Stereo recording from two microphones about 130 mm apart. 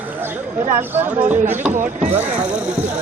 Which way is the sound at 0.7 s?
15° right (ahead or behind).